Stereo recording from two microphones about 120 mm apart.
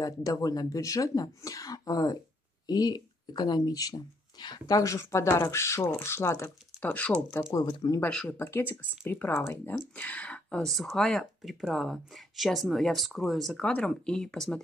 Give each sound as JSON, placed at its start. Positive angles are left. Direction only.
{"t": 0.0, "sound": "speech", "side_deg": 30}
{"t": 6.9, "sound": "speech", "side_deg": 10}
{"t": 7.6, "sound": "speech", "side_deg": 35}
{"t": 8.1, "sound": "speech", "side_deg": 5}
{"t": 8.4, "sound": "speech", "side_deg": 20}